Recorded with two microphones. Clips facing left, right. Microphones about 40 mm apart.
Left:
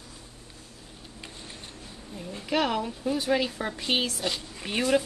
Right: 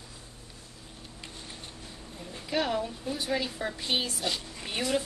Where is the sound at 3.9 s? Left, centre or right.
Left.